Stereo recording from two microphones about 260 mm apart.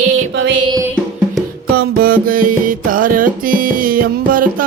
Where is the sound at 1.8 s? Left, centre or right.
Right.